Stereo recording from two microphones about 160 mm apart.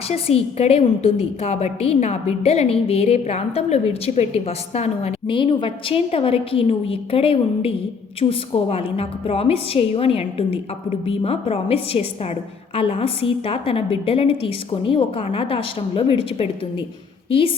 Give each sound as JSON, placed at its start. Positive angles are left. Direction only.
{"t": 0.1, "sound": "a woman's voice", "side_deg": 40}